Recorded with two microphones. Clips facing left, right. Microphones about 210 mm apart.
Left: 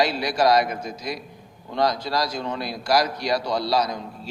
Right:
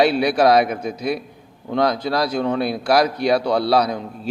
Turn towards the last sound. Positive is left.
turn(degrees=-60)  # may be behind; listen again after turning